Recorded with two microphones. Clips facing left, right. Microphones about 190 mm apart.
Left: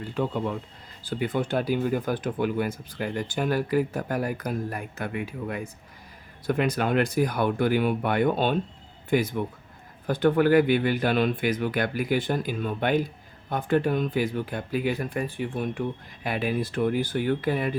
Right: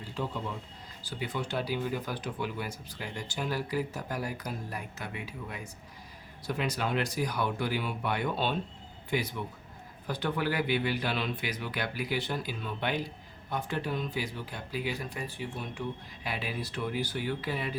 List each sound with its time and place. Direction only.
0.0 s speech: 60° left (ahead or behind)